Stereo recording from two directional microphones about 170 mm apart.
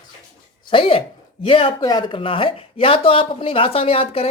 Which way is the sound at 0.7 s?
30° left (ahead or behind).